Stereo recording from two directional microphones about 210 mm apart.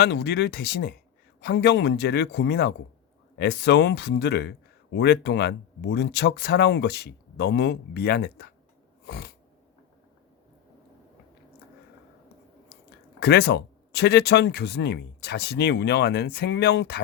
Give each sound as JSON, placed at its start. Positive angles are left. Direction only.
{"t": 0.0, "sound": "speech", "side_deg": 55}
{"t": 9.0, "sound": "a sound", "side_deg": 50}
{"t": 13.1, "sound": "speech", "side_deg": 50}